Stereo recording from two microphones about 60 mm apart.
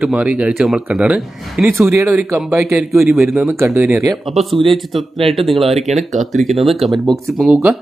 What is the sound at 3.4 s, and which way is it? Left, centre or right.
Speech, right.